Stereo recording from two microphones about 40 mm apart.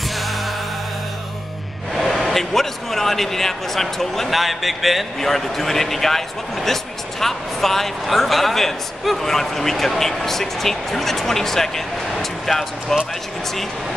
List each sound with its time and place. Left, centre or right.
0.1 s music: centre
2.0 s a man's voice: centre